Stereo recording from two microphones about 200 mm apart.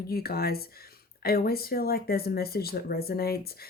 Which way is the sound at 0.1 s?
50° left (ahead or behind).